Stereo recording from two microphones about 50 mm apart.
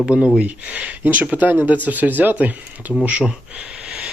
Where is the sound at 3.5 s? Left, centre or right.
Right.